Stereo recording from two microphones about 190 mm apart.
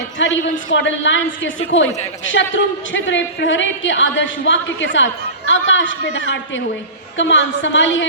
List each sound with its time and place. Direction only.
0.2 s a woman's voice: 75° left (ahead or behind)
2.9 s a woman's voice: 75° left (ahead or behind)